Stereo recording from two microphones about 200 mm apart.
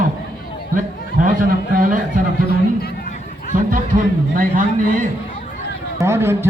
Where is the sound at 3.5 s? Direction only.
45° right (ahead or behind).